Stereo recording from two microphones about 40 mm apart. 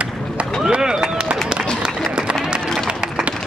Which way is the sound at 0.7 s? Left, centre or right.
Centre.